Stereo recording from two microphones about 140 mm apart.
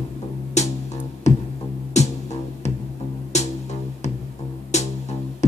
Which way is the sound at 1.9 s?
50° left (ahead or behind).